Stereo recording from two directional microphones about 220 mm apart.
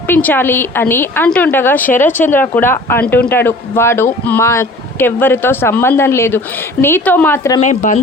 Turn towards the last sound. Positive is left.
turn(degrees=35)  # may be behind; listen again after turning